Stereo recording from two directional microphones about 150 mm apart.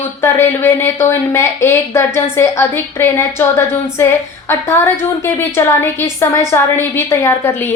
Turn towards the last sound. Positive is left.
turn(degrees=15)  # may be behind; listen again after turning